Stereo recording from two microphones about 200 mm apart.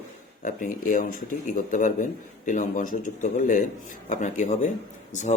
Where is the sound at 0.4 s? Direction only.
40° left (ahead or behind).